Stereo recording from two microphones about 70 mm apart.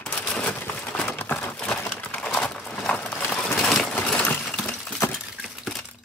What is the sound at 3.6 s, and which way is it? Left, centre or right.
Sewing machine, centre.